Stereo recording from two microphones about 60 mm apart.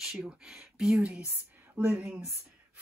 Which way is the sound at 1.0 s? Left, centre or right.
Right.